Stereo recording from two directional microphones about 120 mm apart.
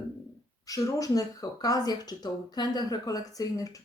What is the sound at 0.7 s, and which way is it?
Speech, 30° left (ahead or behind).